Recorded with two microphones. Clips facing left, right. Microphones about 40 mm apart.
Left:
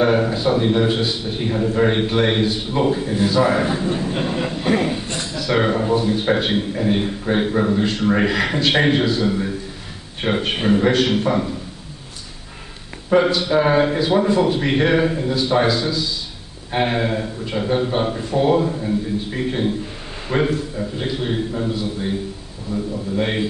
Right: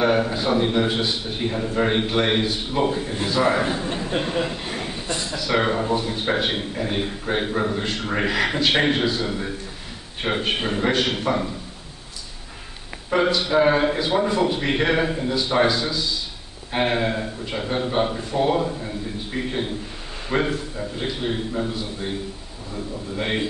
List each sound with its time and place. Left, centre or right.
0.0 s a sound: centre
0.6 s a man's voice: centre
4.6 s a man's voice: left
5.3 s a man's voice: centre
10.7 s a man's voice: centre
11.1 s a man's voice: centre
13.1 s a man's voice: centre
23.1 s a man's voice: centre